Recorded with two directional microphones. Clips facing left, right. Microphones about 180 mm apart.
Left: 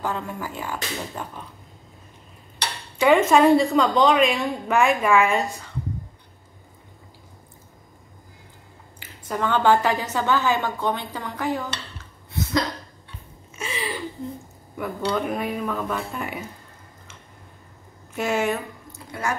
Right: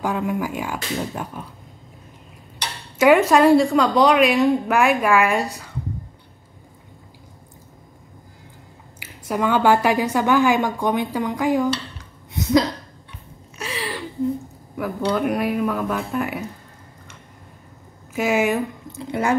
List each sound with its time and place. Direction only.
0.0 s a woman's voice: 10° right (ahead or behind)
3.0 s a woman's voice: 5° right (ahead or behind)
9.0 s a woman's voice: 10° right (ahead or behind)
12.0 s dishes: 20° right (ahead or behind)
13.6 s a sound: centre (ahead or behind)
15.0 s a woman's voice: 10° right (ahead or behind)
18.1 s a woman's voice: 5° right (ahead or behind)